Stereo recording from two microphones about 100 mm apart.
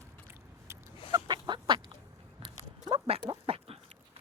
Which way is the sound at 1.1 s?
45° right (ahead or behind).